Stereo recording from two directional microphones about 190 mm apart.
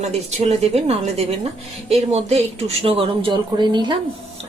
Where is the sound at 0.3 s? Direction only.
35° right (ahead or behind).